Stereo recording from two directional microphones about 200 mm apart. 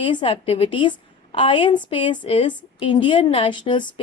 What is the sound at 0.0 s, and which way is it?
A woman's voice, 25° left (ahead or behind).